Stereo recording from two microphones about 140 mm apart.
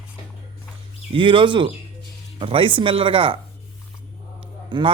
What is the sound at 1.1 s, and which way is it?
A man's voice, 35° right (ahead or behind).